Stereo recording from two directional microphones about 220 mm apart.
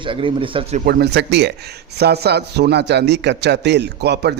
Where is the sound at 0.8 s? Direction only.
50° right (ahead or behind).